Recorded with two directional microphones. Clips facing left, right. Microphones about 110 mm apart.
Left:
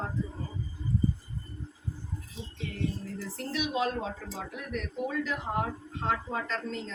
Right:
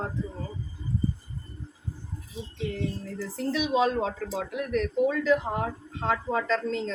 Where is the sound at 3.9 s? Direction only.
85° right.